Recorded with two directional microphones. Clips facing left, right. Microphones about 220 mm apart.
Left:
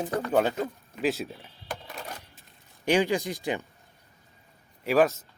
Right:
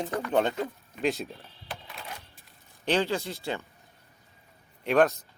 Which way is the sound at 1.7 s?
45° left (ahead or behind).